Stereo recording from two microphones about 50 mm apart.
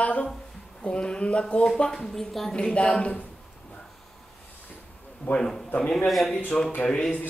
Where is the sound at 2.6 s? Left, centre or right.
Left.